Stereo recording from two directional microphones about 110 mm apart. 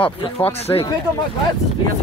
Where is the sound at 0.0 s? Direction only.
55° left (ahead or behind).